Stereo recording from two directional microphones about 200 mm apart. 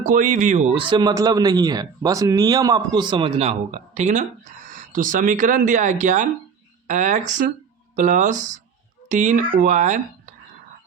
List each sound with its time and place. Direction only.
0.0 s speech: 40° right (ahead or behind)